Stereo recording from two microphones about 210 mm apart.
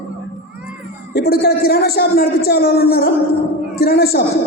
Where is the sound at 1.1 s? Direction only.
45° left (ahead or behind).